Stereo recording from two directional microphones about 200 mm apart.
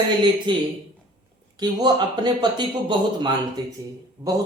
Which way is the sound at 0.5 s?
25° right (ahead or behind).